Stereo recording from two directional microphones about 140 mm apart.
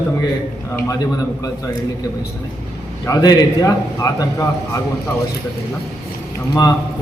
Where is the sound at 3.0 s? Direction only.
25° left (ahead or behind).